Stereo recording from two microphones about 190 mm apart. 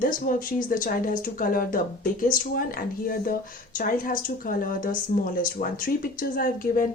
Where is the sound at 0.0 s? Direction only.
45° left (ahead or behind).